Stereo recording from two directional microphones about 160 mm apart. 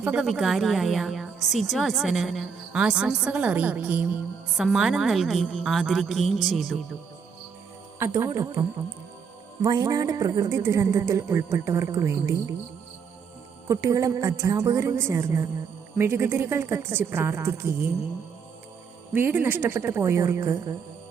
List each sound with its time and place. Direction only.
0.0 s a woman's voice: 5° right (ahead or behind)
7.9 s speech: 20° right (ahead or behind)
13.7 s a woman's voice: 20° right (ahead or behind)
19.1 s a woman's voice: 15° right (ahead or behind)